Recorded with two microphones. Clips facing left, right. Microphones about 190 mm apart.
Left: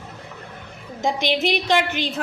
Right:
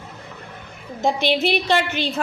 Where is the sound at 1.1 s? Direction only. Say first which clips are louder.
Even; 15° left (ahead or behind).